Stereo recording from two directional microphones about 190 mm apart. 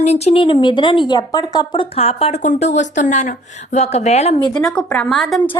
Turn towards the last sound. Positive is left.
turn(degrees=0)  # may be behind; listen again after turning